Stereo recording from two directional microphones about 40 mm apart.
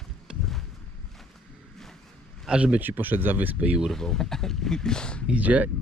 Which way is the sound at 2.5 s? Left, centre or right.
Right.